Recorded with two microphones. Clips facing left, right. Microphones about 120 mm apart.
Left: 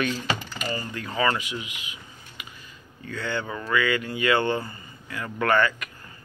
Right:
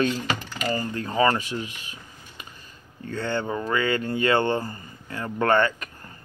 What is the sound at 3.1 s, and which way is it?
Speech, 25° right (ahead or behind).